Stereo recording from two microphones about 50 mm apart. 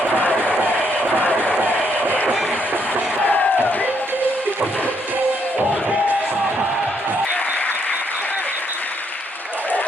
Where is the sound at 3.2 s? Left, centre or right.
Left.